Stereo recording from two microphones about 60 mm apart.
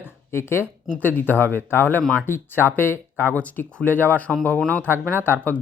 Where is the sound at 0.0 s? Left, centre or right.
Left.